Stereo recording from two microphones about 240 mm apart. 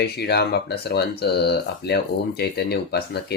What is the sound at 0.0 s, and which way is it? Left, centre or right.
Speech, left.